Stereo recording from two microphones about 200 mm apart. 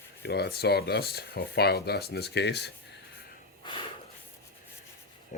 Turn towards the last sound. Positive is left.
turn(degrees=40)  # may be behind; listen again after turning